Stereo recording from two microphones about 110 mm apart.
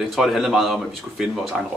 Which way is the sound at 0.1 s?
Centre (ahead or behind).